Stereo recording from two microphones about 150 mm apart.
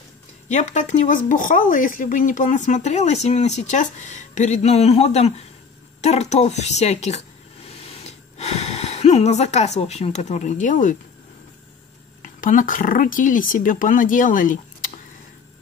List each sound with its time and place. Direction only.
0.5 s speech: 55° left (ahead or behind)
12.2 s speech: 60° left (ahead or behind)